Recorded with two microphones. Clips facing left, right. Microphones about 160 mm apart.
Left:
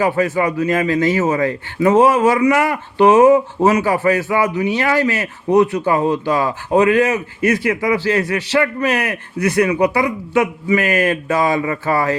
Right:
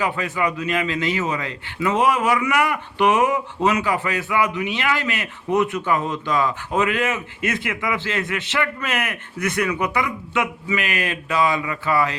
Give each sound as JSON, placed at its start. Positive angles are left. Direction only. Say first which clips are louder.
{"t": 0.0, "sound": "a man's voice", "louder": "left 7 dB", "side_deg": 40}
{"t": 7.4, "sound": "speech", "louder": "left 9 dB", "side_deg": -20}
{"t": 7.7, "sound": "a man's voice", "louder": "left 8 dB", "side_deg": 35}